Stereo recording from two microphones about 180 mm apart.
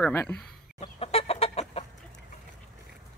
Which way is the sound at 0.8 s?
30° left (ahead or behind).